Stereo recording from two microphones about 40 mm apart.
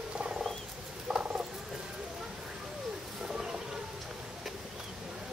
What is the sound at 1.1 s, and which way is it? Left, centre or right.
Frog, right.